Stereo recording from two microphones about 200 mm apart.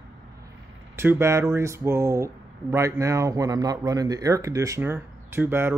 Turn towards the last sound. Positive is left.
turn(degrees=-10)  # may be behind; listen again after turning